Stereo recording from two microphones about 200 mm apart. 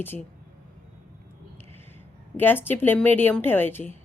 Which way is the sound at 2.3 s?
10° left (ahead or behind).